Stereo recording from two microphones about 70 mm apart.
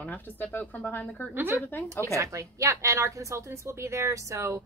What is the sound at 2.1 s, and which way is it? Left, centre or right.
A woman's voice, right.